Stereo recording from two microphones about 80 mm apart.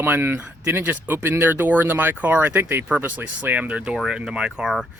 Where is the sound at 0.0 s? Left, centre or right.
Right.